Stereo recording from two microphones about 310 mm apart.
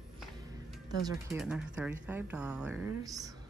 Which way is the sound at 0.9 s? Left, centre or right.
Centre.